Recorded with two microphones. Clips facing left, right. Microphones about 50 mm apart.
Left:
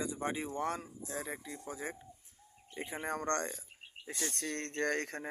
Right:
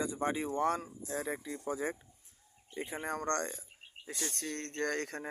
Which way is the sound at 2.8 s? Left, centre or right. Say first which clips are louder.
Right 1 dB; centre.